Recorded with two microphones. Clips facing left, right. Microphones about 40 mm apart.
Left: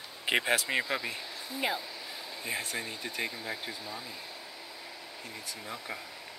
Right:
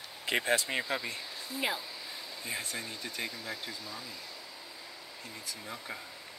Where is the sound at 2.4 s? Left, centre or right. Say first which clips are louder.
Left 3 dB; centre.